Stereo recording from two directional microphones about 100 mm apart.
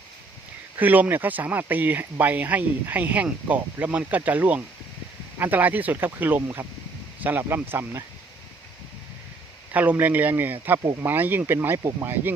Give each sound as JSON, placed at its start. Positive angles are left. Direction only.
{"t": 0.8, "sound": "speech", "side_deg": -20}
{"t": 9.7, "sound": "speech", "side_deg": -15}